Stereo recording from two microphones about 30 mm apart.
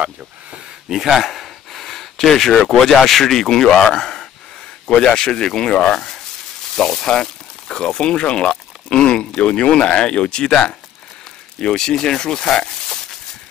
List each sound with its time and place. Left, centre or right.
0.8 s speech: centre
1.3 s gasp: centre
2.7 s speech: centre
4.8 s speech: left
6.7 s speech: centre